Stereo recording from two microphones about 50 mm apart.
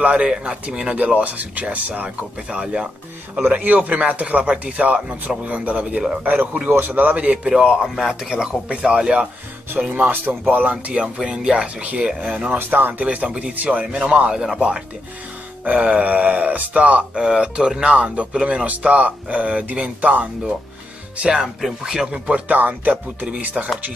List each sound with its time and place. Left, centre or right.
0.0 s speech: centre; by 2.0 s right
2.5 s speech: right
7.4 s speech: centre; by 10.8 s right
10.9 s speech: right
12.5 s speech: right
13.0 s speech: right
14.3 s speech: centre
15.6 s speech: right
17.9 s speech: right
21.2 s speech: centre
22.6 s speech: right
23.6 s speech: centre